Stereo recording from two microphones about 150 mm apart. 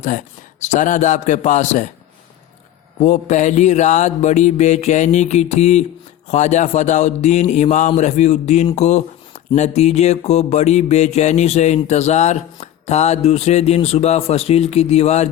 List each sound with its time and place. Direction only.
0.0 s a man's voice: 55° left (ahead or behind)
3.0 s music: 50° left (ahead or behind)
8.7 s speech: 50° left (ahead or behind)
9.6 s music: 45° left (ahead or behind)